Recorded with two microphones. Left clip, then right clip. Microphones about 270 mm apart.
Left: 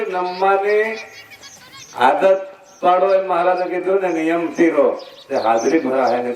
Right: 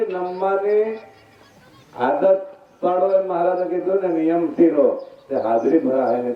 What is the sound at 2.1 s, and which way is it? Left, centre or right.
A man's voice, left.